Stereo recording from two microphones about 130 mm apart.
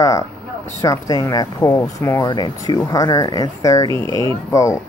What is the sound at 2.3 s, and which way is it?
Speech, 35° left (ahead or behind).